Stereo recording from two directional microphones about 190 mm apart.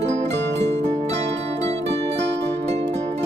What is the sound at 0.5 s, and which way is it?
Music, 65° right (ahead or behind).